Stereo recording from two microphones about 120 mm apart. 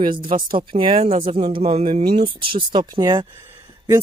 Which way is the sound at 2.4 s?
40° right (ahead or behind).